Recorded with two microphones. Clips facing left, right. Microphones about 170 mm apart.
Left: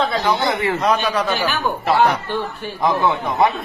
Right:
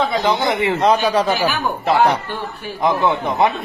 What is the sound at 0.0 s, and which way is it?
A man's voice, 20° right (ahead or behind).